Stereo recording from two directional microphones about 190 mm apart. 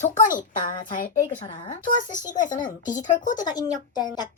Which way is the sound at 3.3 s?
20° left (ahead or behind).